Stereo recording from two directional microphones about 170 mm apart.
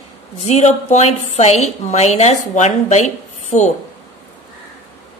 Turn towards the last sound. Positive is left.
turn(degrees=45)  # may be behind; listen again after turning